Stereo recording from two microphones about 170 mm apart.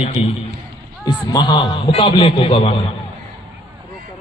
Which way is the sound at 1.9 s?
35° left (ahead or behind).